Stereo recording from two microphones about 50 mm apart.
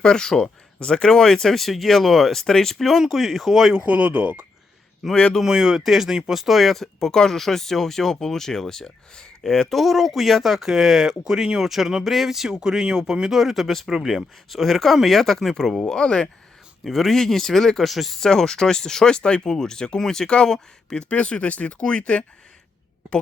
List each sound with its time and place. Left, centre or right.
0.0 s speech: centre
3.7 s speech: right
5.1 s speech: centre
5.4 s speech: centre
16.8 s speech: centre; by 22.2 s left